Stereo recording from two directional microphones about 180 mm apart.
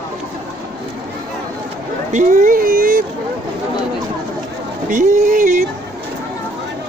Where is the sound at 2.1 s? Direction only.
45° right (ahead or behind).